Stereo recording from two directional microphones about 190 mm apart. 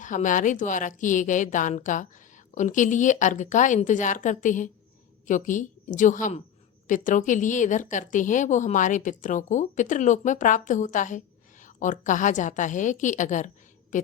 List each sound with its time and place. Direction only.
0.0 s a woman's voice: 40° left (ahead or behind)